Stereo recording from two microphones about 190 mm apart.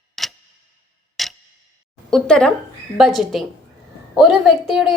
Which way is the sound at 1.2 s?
Centre (ahead or behind).